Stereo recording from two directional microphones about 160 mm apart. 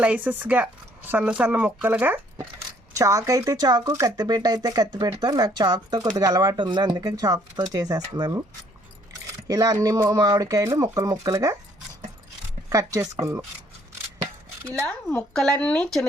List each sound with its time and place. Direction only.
0.0 s speech: 10° right (ahead or behind); by 8.3 s 25° right (ahead or behind)
9.5 s speech: 25° right (ahead or behind)
12.7 s speech: 20° right (ahead or behind)
15.3 s speech: 5° left (ahead or behind)